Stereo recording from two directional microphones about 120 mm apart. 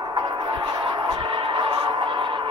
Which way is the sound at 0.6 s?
40° right (ahead or behind).